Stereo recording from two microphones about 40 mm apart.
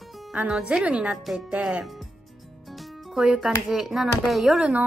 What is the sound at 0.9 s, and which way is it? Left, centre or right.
Speech, right.